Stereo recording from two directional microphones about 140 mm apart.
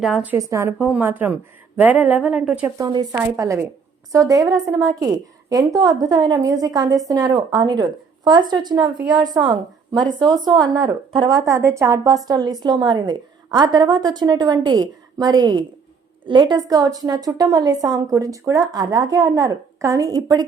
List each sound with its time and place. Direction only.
0.0 s a woman's voice: centre (ahead or behind)
0.3 s a woman's voice: 20° right (ahead or behind)
0.8 s a woman's voice: 10° right (ahead or behind)
2.6 s a woman's voice: 25° right (ahead or behind)